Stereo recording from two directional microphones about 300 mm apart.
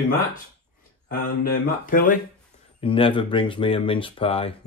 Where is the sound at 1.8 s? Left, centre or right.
Left.